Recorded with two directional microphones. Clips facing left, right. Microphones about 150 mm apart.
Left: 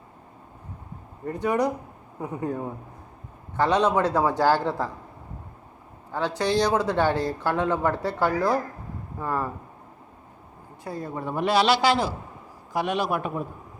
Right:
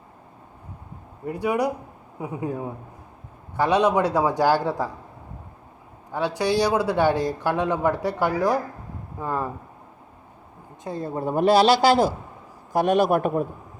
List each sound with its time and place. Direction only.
1.2 s speech: 10° right (ahead or behind)
6.1 s speech: 15° right (ahead or behind)
10.8 s a woman's voice: 25° right (ahead or behind); by 13.4 s 50° right (ahead or behind)